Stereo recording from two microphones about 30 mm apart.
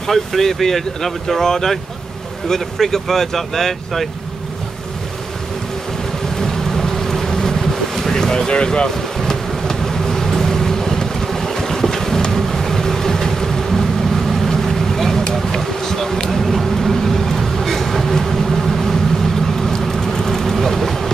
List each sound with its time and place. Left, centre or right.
0.0 s speech: centre
6.3 s boat: centre
8.8 s vehicle: centre
12.3 s boat: centre
15.6 s bee: centre
16.3 s vehicle: centre